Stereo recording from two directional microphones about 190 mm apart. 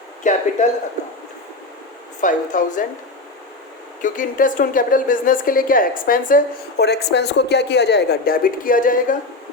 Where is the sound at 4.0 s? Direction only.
45° left (ahead or behind).